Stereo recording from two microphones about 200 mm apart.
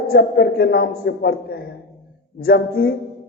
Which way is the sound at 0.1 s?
55° left (ahead or behind).